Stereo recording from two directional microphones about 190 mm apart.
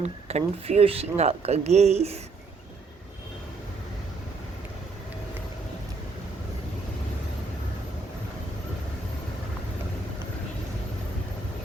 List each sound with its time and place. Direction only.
0.0 s speech: 35° right (ahead or behind)